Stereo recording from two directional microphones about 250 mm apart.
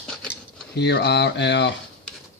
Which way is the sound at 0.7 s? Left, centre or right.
Left.